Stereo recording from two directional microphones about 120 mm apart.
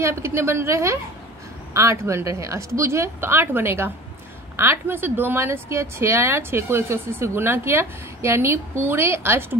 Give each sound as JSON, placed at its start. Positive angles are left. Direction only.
{"t": 0.0, "sound": "a woman's voice", "side_deg": -25}